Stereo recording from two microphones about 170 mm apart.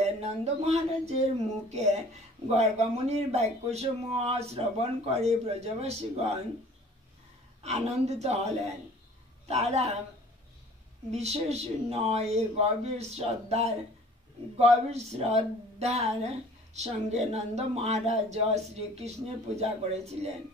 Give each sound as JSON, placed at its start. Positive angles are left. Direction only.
{"t": 0.0, "sound": "a sound", "side_deg": -40}
{"t": 1.7, "sound": "speech", "side_deg": -40}
{"t": 7.6, "sound": "speech", "side_deg": -40}
{"t": 11.1, "sound": "speech", "side_deg": -40}